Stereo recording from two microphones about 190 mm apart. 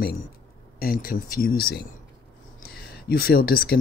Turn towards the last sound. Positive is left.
turn(degrees=55)  # may be behind; listen again after turning